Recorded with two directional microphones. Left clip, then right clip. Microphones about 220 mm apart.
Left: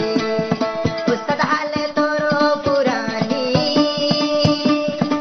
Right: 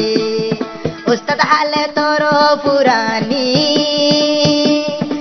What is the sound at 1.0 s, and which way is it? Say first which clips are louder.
Music: right 7 dB; 30° right (ahead or behind).